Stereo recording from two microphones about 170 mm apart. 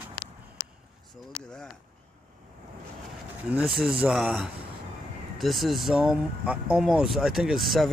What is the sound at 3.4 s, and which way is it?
Speech, 5° right (ahead or behind).